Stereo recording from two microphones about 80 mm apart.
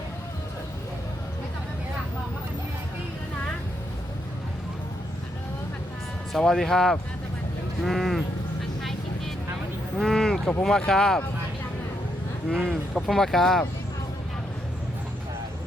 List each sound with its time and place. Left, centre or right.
6.3 s speech: centre
8.8 s vehicle: centre
10.0 s a sound: centre
10.6 s speech: centre
12.5 s speech: centre